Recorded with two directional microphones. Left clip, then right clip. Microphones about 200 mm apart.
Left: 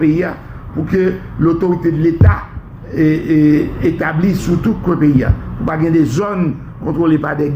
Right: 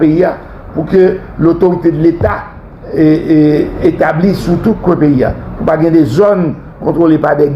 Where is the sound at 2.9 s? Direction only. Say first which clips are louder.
Right 5 dB; 35° right (ahead or behind).